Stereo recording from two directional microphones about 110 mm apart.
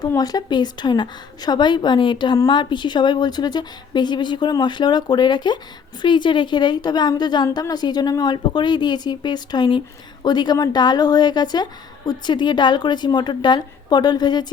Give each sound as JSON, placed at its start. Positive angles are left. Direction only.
{"t": 0.2, "sound": "a woman's voice", "side_deg": 35}